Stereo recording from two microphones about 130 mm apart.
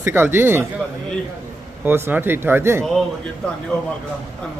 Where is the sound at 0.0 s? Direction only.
15° right (ahead or behind).